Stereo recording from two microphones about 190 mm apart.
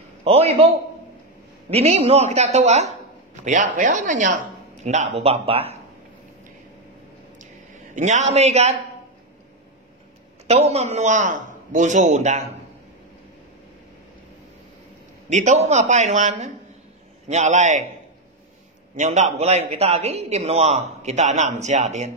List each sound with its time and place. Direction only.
0.2 s a man's voice: 30° right (ahead or behind)
1.7 s a man's voice: 30° right (ahead or behind)
7.3 s a sound: 40° right (ahead or behind)
10.4 s a man's voice: 35° right (ahead or behind)
15.3 s a man's voice: 35° right (ahead or behind)
18.9 s a man's voice: 40° right (ahead or behind)